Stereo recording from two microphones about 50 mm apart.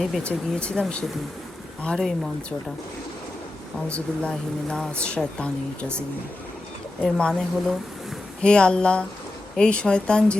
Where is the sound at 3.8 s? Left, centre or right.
Left.